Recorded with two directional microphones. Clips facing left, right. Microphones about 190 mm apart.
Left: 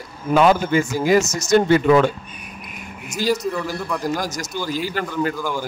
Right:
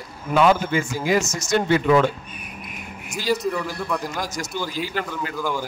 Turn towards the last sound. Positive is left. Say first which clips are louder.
# left 4 dB
turn(degrees=0)  # may be behind; listen again after turning